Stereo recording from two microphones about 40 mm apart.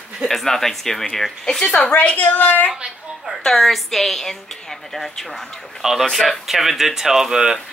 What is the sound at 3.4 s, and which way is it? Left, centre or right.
A woman's voice, centre.